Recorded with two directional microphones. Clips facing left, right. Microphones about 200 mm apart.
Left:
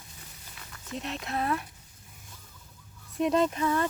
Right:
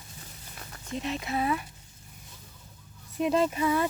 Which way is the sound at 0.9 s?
Centre (ahead or behind).